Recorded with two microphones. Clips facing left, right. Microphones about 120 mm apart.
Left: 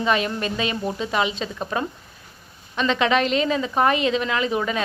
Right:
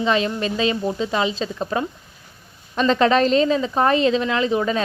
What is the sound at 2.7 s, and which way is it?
A woman's voice, 35° right (ahead or behind).